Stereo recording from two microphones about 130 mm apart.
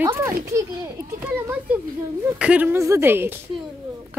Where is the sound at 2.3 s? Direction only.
10° right (ahead or behind).